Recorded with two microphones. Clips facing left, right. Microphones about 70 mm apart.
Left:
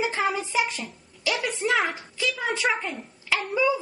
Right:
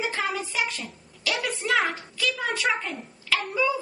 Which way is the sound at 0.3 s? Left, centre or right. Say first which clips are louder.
Left 3 dB; left.